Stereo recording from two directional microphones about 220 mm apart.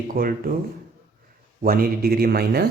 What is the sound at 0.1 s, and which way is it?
Speech, 40° right (ahead or behind).